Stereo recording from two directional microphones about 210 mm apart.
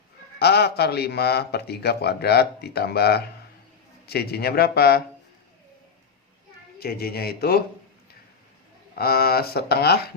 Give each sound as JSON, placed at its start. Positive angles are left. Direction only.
{"t": 0.3, "sound": "a man's voice", "side_deg": 50}
{"t": 6.7, "sound": "a man's voice", "side_deg": 45}
{"t": 9.0, "sound": "a man's voice", "side_deg": 45}